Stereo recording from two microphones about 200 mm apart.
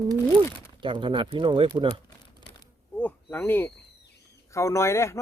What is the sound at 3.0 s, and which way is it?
Speech, 10° left (ahead or behind).